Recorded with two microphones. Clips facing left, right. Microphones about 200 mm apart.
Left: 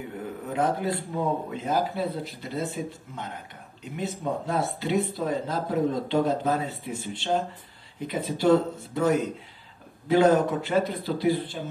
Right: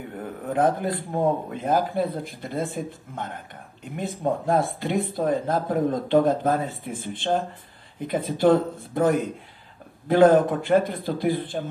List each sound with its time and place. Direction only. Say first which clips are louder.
0.2 s speech: right 5 dB; 50° right (ahead or behind)